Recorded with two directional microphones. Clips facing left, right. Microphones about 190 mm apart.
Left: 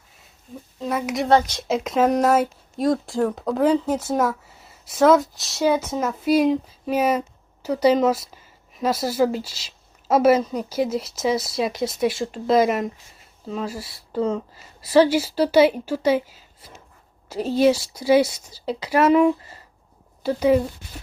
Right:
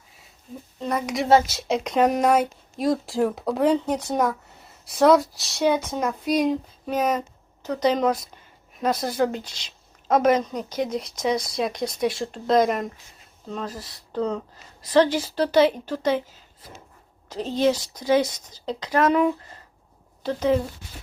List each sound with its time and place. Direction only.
0.8 s speech: 5° left (ahead or behind)